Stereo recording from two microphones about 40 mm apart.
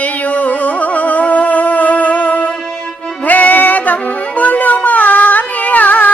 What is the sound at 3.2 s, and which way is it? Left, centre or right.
Music, left.